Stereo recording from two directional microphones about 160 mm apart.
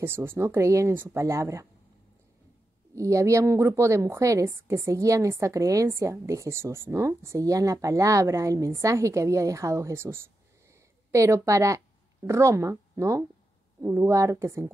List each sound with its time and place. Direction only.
0.0 s speech: 15° right (ahead or behind)
3.0 s a woman's voice: 20° right (ahead or behind)